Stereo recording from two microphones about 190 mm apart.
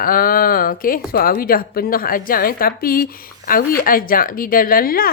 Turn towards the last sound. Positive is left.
turn(degrees=50)  # may be behind; listen again after turning